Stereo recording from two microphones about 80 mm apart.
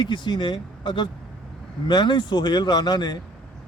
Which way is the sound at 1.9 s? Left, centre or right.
Left.